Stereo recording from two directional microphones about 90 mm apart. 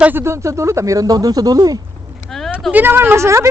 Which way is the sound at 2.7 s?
20° right (ahead or behind).